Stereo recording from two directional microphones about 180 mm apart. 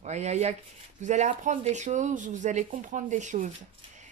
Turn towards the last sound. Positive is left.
turn(degrees=-45)  # may be behind; listen again after turning